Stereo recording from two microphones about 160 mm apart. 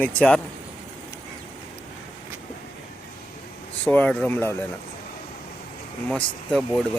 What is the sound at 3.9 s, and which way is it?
Speech, 10° left (ahead or behind).